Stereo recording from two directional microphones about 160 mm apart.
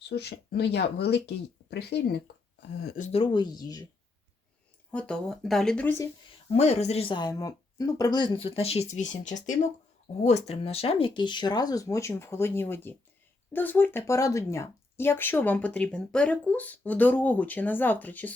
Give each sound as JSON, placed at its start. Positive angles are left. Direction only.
{"t": 0.1, "sound": "speech", "side_deg": 90}
{"t": 3.0, "sound": "speech", "side_deg": 40}
{"t": 3.3, "sound": "speech", "side_deg": 25}
{"t": 4.9, "sound": "speech", "side_deg": 5}
{"t": 6.5, "sound": "speech", "side_deg": 45}